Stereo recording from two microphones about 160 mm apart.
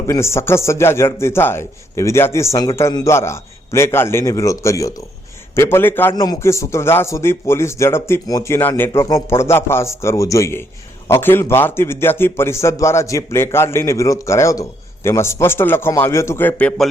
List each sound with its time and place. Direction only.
0.1 s a man's voice: 15° left (ahead or behind)